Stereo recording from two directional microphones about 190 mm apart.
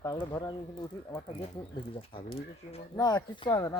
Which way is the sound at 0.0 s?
20° left (ahead or behind).